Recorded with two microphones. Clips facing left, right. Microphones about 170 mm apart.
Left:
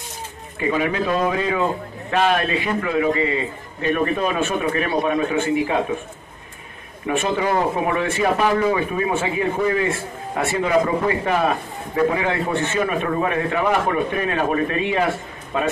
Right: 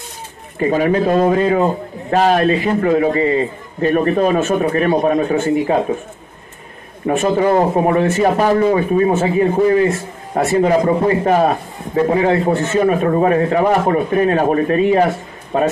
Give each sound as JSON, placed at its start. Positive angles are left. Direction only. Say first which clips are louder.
{"t": 0.6, "sound": "speech", "louder": "right 6 dB", "side_deg": -40}
{"t": 7.1, "sound": "speech", "louder": "right 6 dB", "side_deg": -40}